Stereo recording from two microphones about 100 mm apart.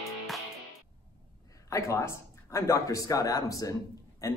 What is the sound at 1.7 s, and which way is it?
A man's voice, 30° left (ahead or behind).